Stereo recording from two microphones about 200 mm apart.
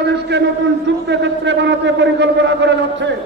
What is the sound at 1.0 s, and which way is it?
A man's voice, 60° right (ahead or behind).